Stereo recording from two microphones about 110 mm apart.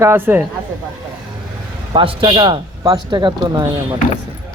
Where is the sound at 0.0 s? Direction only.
20° right (ahead or behind).